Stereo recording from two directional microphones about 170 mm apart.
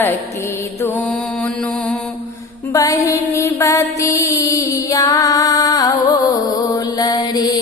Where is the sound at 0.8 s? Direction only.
5° left (ahead or behind).